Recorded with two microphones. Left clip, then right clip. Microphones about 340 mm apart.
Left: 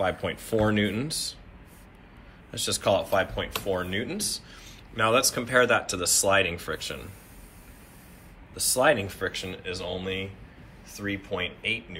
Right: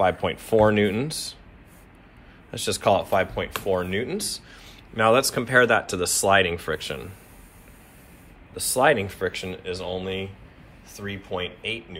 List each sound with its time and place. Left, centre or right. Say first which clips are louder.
0.0 s speech: right 6 dB; centre
2.5 s speech: right 3 dB; centre
8.5 s speech: right 3 dB; right